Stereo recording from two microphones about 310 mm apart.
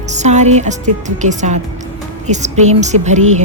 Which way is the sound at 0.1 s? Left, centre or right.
Right.